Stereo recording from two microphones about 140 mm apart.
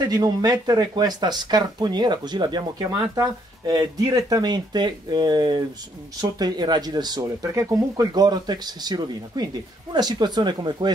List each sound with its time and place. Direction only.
0.1 s speech: 25° right (ahead or behind)